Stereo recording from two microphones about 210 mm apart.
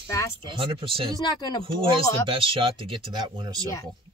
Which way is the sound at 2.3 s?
25° right (ahead or behind).